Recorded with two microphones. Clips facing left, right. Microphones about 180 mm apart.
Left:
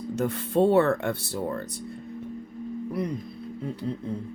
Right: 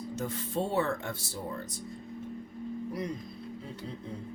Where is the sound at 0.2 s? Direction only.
60° left (ahead or behind).